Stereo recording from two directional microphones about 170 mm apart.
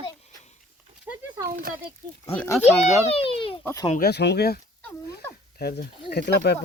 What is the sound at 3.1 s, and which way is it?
Speech, 35° left (ahead or behind).